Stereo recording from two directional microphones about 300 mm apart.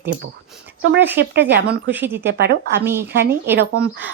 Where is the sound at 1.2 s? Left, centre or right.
Right.